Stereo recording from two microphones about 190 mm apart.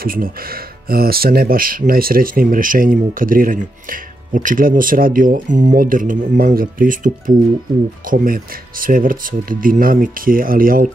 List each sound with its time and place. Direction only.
0.0 s speech: 50° right (ahead or behind)